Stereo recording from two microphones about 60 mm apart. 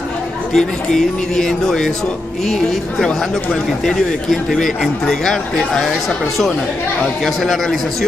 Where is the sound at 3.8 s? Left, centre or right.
Centre.